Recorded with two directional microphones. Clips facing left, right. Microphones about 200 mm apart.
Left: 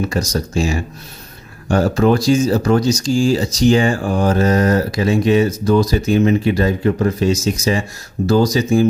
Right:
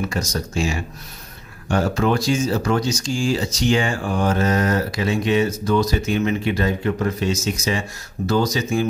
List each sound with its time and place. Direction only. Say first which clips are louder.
0.1 s speech: left 5 dB; 35° left (ahead or behind)